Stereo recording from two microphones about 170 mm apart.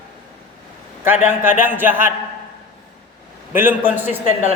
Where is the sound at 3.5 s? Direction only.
10° right (ahead or behind).